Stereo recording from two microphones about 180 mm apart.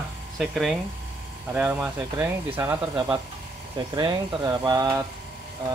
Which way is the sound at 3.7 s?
20° right (ahead or behind).